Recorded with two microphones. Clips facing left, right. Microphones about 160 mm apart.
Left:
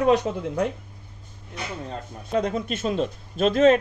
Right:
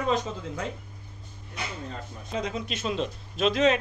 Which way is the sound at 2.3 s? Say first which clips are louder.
Left 7 dB; 55° left (ahead or behind).